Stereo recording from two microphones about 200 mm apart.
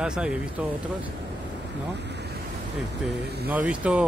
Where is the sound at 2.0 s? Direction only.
60° right (ahead or behind).